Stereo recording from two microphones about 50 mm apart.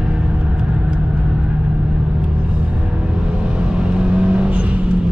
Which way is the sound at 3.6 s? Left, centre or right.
Right.